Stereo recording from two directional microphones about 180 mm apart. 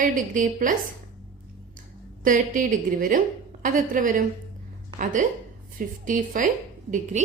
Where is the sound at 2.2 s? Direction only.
45° right (ahead or behind).